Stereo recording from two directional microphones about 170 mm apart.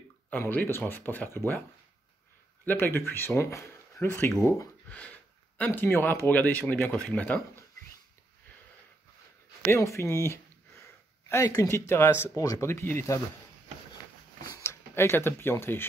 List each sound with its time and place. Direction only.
0.3 s speech: 10° left (ahead or behind)
2.6 s speech: 10° left (ahead or behind)
9.7 s speech: 15° left (ahead or behind)
14.4 s speech: 20° left (ahead or behind)